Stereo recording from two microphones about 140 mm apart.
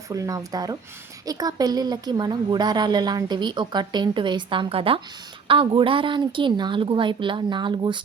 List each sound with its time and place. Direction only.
0.1 s a woman's voice: 25° right (ahead or behind)